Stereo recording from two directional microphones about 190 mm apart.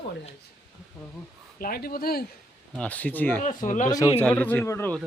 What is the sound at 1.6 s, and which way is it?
Speech, 50° left (ahead or behind).